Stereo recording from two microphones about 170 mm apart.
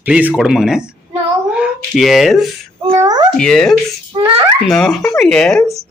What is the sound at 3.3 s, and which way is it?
A man's voice, 5° left (ahead or behind).